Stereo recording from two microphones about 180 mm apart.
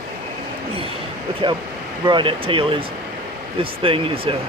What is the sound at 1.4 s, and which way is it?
Speech, 25° right (ahead or behind).